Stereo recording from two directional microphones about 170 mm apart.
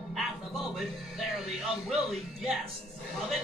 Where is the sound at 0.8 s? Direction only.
Centre (ahead or behind).